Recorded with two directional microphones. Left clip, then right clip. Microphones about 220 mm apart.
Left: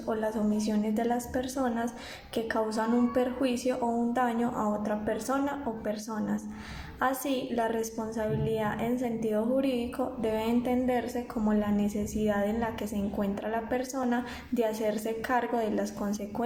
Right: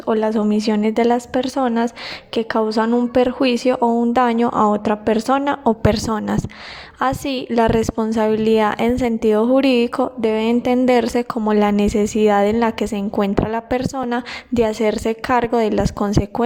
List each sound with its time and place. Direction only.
0.1 s a woman's voice: 40° right (ahead or behind)